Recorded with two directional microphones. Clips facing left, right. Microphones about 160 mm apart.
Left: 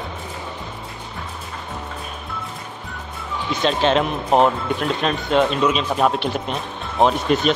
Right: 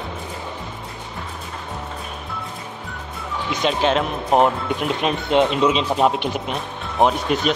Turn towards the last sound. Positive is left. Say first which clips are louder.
# left 1 dB
turn(degrees=-5)  # may be behind; listen again after turning